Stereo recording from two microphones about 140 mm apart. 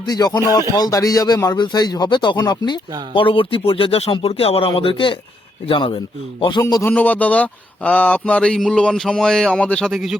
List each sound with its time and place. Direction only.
0.0 s speech: 25° left (ahead or behind)
6.6 s speech: 25° left (ahead or behind)
6.8 s speech: 10° left (ahead or behind)